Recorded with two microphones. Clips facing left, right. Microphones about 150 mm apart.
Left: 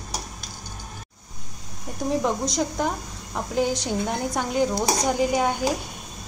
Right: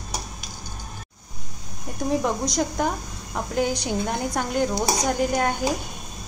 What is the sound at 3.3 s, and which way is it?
Speech, centre (ahead or behind).